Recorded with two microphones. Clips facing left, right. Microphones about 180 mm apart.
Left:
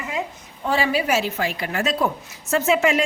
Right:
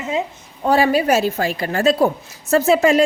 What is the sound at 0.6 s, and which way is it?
Speech, 45° right (ahead or behind).